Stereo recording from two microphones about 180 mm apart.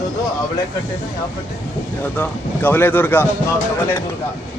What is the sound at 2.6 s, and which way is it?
Speech, 10° left (ahead or behind).